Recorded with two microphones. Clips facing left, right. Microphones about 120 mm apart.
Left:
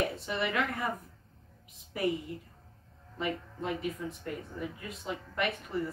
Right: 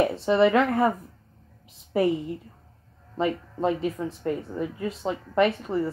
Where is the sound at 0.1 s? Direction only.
30° right (ahead or behind).